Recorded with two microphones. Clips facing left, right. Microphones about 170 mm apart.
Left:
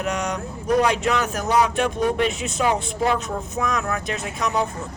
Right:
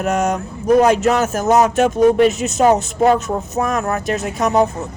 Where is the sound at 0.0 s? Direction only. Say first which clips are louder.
Right 7 dB; 50° right (ahead or behind).